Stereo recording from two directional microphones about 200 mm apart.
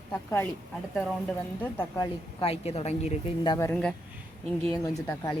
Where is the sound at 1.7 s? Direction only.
10° left (ahead or behind).